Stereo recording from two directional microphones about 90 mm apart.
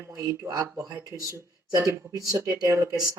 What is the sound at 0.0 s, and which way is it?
Speech, 35° right (ahead or behind).